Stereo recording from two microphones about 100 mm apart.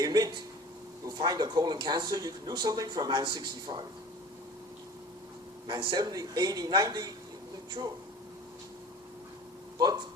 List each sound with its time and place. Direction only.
0.0 s a sound: 40° right (ahead or behind)
1.0 s speech: 40° right (ahead or behind)
5.6 s speech: 45° right (ahead or behind)
9.7 s speech: 40° right (ahead or behind)